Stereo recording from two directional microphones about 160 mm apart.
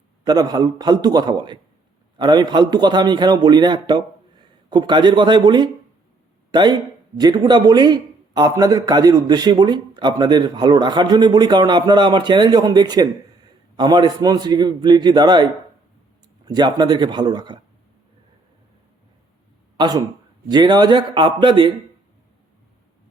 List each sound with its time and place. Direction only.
0.3 s a man's voice: 25° right (ahead or behind)
16.5 s a man's voice: 25° right (ahead or behind)
19.7 s a man's voice: 25° right (ahead or behind)